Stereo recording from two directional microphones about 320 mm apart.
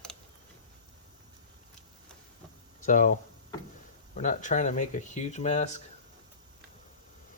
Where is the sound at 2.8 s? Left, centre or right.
Left.